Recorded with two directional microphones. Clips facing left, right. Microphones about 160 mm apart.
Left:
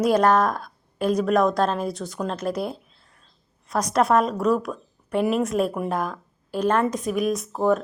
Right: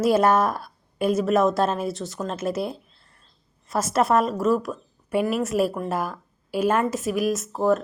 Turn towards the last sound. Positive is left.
turn(degrees=0)  # may be behind; listen again after turning